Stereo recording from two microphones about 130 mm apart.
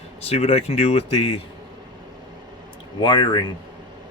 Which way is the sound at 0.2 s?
55° left (ahead or behind).